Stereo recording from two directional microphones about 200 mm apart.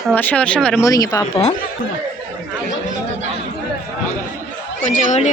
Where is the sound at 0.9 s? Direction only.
15° left (ahead or behind).